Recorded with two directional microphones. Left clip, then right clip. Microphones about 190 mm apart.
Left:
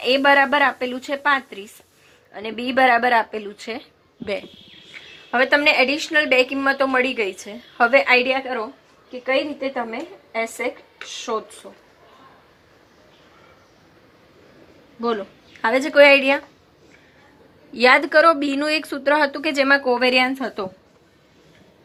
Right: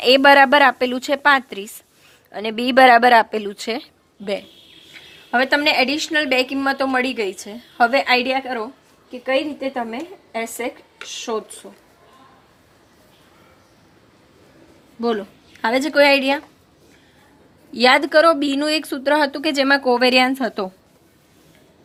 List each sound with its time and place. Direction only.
0.0 s a woman's voice: 85° right
4.9 s a woman's voice: 45° right (ahead or behind)
11.6 s speech: 25° right (ahead or behind)
15.6 s speech: 50° right (ahead or behind)
17.7 s speech: 55° right (ahead or behind); by 20.7 s 90° right